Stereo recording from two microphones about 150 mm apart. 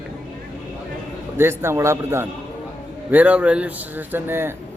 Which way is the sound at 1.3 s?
15° right (ahead or behind).